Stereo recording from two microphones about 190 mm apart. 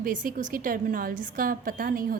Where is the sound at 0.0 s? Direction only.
45° right (ahead or behind).